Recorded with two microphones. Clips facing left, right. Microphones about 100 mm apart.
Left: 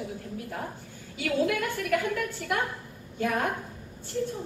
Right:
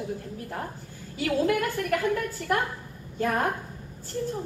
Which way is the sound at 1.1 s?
40° right (ahead or behind).